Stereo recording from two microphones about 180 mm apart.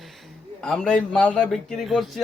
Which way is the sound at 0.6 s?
5° left (ahead or behind).